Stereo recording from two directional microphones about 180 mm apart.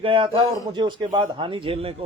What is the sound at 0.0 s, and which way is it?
A man's voice, 30° right (ahead or behind).